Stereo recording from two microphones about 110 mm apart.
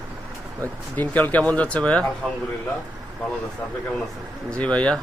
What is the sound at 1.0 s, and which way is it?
A man's voice, 15° left (ahead or behind).